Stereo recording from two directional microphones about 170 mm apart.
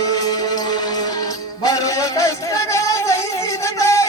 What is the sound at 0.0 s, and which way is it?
Music, 25° left (ahead or behind).